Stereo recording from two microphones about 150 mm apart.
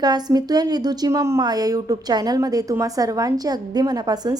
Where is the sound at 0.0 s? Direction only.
25° right (ahead or behind).